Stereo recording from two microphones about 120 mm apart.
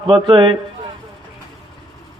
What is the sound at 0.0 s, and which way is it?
Speech, 45° right (ahead or behind).